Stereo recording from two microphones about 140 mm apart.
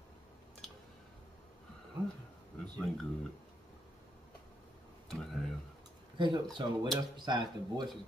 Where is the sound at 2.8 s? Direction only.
Centre (ahead or behind).